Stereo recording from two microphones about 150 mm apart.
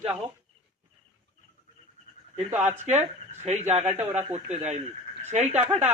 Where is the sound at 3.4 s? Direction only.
45° right (ahead or behind).